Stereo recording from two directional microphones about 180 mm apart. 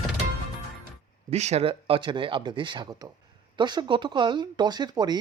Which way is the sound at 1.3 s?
35° right (ahead or behind).